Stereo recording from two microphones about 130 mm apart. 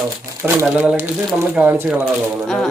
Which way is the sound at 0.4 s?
20° right (ahead or behind).